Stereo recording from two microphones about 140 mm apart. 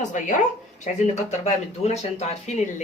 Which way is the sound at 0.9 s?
55° left (ahead or behind).